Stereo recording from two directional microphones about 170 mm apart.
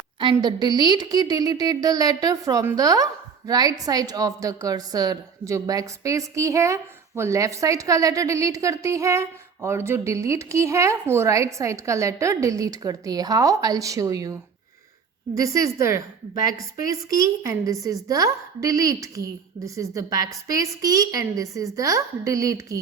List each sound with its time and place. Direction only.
0.3 s a woman's voice: 25° right (ahead or behind)
15.4 s a woman's voice: 20° right (ahead or behind)